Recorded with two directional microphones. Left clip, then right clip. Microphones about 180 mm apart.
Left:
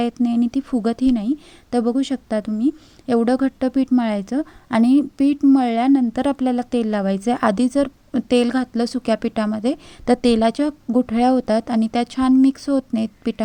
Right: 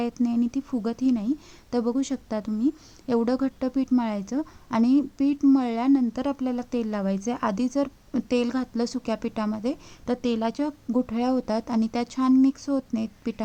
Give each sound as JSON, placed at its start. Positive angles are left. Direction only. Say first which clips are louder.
{"t": 0.0, "sound": "a woman's voice", "louder": "left 6 dB", "side_deg": 15}